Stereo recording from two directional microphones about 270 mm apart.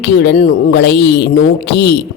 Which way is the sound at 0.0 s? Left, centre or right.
Left.